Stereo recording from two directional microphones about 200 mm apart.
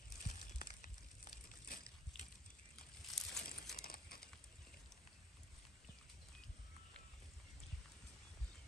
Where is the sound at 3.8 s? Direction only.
50° left (ahead or behind).